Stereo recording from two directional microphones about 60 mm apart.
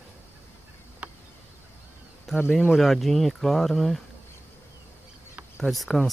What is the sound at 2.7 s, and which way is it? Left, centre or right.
Speech, centre.